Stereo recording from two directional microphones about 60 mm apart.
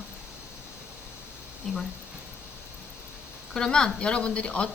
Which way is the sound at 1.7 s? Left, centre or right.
Centre.